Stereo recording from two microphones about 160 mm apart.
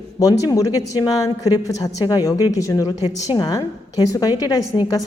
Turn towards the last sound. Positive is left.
turn(degrees=25)  # may be behind; listen again after turning